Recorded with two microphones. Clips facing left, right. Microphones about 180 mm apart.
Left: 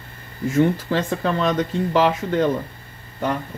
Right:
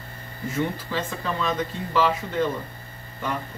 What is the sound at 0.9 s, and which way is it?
Speech, 65° left (ahead or behind).